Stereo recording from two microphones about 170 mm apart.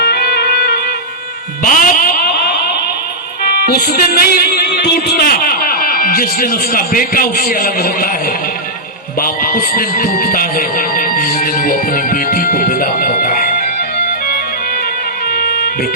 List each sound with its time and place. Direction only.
0.0 s music: 65° left (ahead or behind)
1.6 s a sound: 55° left (ahead or behind)
3.4 s music: 65° left (ahead or behind)
9.2 s music: 60° left (ahead or behind)
15.3 s music: 60° left (ahead or behind)